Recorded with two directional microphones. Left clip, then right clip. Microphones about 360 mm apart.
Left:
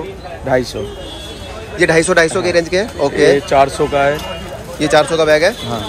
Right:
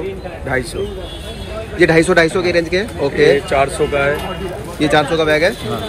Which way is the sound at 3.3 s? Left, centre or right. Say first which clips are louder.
Left 3 dB; left.